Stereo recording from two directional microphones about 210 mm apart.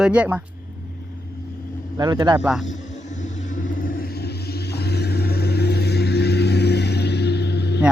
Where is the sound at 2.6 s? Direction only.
35° left (ahead or behind); by 7.8 s 55° left (ahead or behind).